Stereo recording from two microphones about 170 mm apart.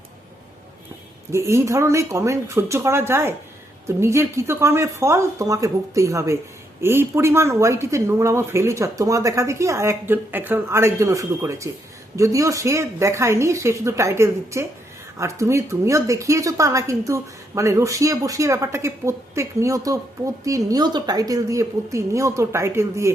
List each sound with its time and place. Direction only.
1.3 s a woman's voice: 15° right (ahead or behind)